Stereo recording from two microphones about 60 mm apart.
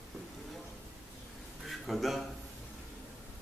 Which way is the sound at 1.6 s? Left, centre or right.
Centre.